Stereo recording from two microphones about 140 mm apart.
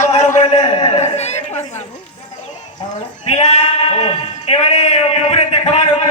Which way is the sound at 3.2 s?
50° left (ahead or behind).